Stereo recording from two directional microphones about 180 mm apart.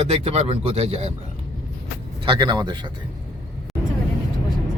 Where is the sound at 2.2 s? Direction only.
25° right (ahead or behind).